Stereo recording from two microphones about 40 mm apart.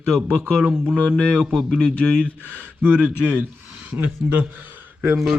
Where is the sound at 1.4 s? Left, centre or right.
Right.